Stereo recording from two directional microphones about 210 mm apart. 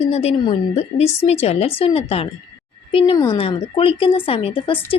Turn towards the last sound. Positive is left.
turn(degrees=25)  # may be behind; listen again after turning